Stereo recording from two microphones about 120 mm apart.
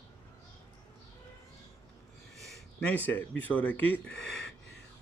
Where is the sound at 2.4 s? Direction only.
10° left (ahead or behind).